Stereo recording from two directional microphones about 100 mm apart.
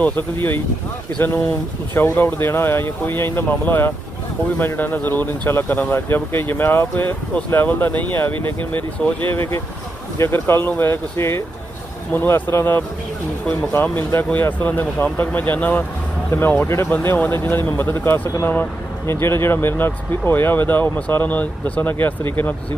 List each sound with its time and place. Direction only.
0.0 s speech: 20° left (ahead or behind)
2.0 s speech: 20° left (ahead or behind)